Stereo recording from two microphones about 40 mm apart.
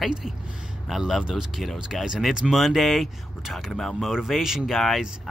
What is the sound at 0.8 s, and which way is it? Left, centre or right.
Speech, centre.